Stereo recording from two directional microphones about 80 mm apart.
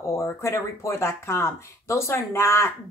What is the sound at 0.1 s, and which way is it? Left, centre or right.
Speech, left.